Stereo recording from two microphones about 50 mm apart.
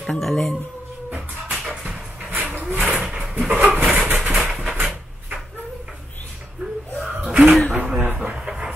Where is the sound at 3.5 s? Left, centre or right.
Right.